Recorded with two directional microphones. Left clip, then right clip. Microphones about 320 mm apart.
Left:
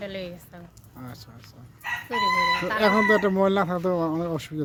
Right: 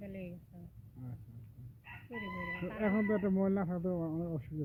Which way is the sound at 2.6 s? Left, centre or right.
Centre.